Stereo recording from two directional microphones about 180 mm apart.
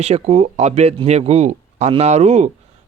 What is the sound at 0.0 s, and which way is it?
Speech, 35° right (ahead or behind).